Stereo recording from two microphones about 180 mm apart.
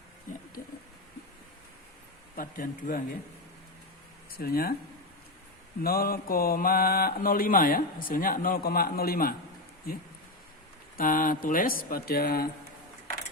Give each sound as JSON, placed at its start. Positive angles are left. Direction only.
{"t": 2.3, "sound": "speech", "side_deg": 50}
{"t": 4.4, "sound": "speech", "side_deg": 55}
{"t": 5.8, "sound": "speech", "side_deg": 55}
{"t": 10.9, "sound": "speech", "side_deg": 50}